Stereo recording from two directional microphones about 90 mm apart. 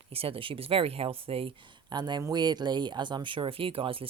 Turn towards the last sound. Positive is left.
turn(degrees=-90)